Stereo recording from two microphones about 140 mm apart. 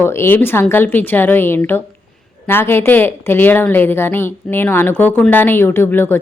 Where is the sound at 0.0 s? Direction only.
15° left (ahead or behind).